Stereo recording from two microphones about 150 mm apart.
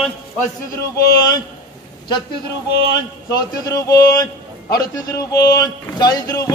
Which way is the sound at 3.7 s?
20° left (ahead or behind).